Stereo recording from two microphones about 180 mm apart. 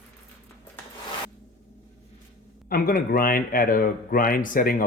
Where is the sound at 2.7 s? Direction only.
55° left (ahead or behind).